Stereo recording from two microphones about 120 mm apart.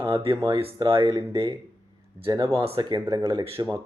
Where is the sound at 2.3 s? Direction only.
50° right (ahead or behind).